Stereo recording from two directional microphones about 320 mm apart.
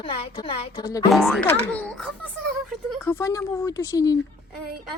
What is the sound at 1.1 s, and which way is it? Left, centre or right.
A child's voice, centre.